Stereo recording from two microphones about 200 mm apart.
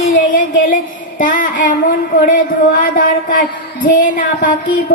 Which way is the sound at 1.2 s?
40° left (ahead or behind).